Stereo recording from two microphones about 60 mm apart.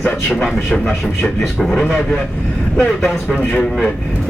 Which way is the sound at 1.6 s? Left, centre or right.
Centre.